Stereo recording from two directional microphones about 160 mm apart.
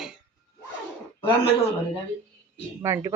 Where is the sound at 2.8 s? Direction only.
20° right (ahead or behind).